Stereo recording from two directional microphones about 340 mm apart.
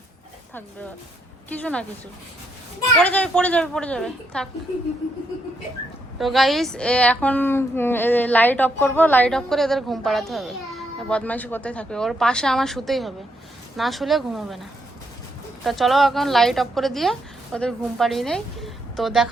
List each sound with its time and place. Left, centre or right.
1.5 s a woman's voice: centre
3.0 s a woman's voice: centre
6.1 s a woman's voice: centre
15.6 s a woman's voice: centre